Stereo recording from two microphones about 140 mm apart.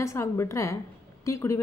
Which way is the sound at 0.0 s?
20° left (ahead or behind).